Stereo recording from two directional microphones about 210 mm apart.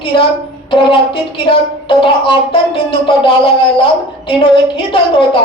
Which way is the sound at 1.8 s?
25° left (ahead or behind).